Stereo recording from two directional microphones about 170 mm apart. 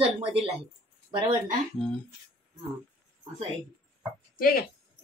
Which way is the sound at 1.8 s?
5° left (ahead or behind).